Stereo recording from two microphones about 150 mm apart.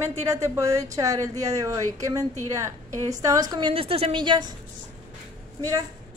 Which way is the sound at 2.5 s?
20° right (ahead or behind).